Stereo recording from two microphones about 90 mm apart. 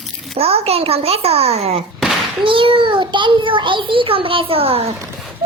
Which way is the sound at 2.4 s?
70° right (ahead or behind).